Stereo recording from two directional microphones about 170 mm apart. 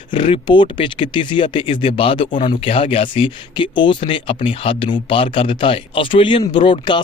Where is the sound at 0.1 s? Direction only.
30° left (ahead or behind).